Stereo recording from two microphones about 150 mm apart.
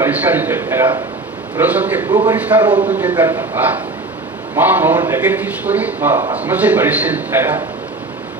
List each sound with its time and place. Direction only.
0.0 s a man's voice: 10° right (ahead or behind)
2.0 s a man's voice: 25° right (ahead or behind)
2.3 s a man's voice: 10° right (ahead or behind)